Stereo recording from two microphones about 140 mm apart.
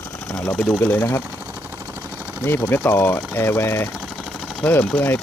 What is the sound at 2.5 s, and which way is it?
Speech, 20° left (ahead or behind).